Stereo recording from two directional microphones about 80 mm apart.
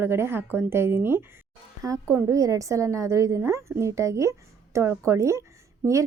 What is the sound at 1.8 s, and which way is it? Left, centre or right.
A child's voice, right.